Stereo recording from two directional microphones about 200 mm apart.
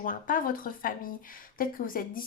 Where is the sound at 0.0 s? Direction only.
45° left (ahead or behind).